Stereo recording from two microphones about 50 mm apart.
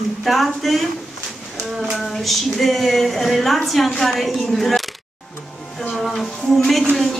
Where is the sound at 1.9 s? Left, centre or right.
Centre.